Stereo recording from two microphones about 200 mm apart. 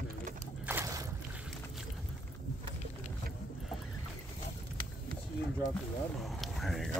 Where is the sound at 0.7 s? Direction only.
15° right (ahead or behind).